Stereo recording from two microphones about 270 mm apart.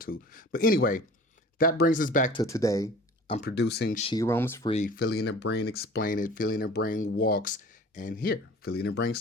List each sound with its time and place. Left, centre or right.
0.0 s speech: left
2.3 s speech: centre
3.3 s speech: left
4.0 s speech: centre
4.7 s speech: left